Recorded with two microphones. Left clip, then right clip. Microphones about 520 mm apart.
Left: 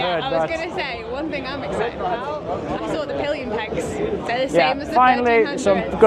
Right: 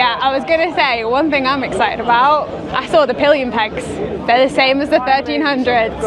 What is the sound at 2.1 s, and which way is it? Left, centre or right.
Speech, right.